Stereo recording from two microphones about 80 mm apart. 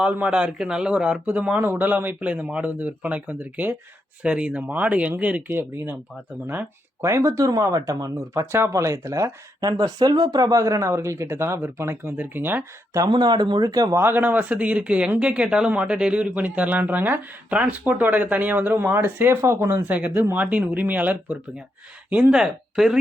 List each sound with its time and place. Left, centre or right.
0.0 s speech: centre
7.0 s speech: right
9.6 s speech: right
13.1 s speech: right
13.9 s speech: right; by 23.0 s centre